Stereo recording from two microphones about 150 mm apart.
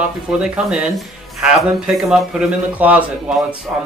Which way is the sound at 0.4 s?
5° right (ahead or behind).